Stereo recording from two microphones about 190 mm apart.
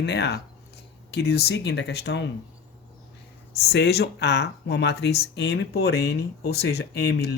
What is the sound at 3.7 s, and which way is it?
Speech, 60° left (ahead or behind).